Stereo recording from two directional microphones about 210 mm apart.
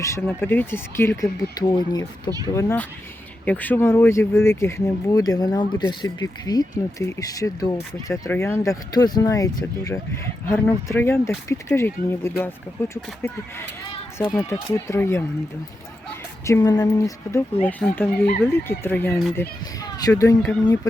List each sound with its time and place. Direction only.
0.0 s speech: 10° left (ahead or behind)
16.5 s speech: 15° left (ahead or behind)